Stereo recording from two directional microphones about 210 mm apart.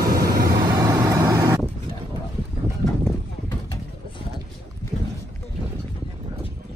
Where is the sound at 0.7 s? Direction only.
20° right (ahead or behind).